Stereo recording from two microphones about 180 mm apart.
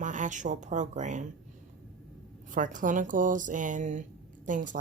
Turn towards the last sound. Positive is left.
turn(degrees=-45)  # may be behind; listen again after turning